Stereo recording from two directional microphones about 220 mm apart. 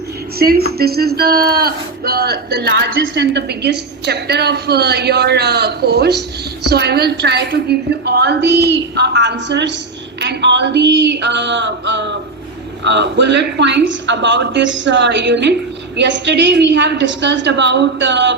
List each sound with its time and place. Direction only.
0.3 s speech: 45° right (ahead or behind)